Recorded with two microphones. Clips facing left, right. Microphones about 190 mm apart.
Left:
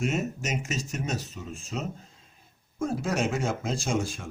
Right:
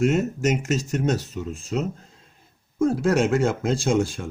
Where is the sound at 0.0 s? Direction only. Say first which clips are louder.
Right 8 dB; 70° right (ahead or behind).